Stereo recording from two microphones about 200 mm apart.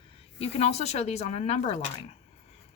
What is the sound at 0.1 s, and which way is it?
Speech, 30° left (ahead or behind).